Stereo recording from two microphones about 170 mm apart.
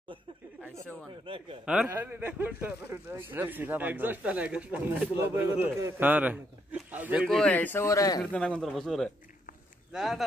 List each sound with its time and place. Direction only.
1.2 s a man's voice: 30° right (ahead or behind)
1.7 s speech: 10° right (ahead or behind)
7.2 s speech: 5° left (ahead or behind)
8.2 s speech: 5° left (ahead or behind)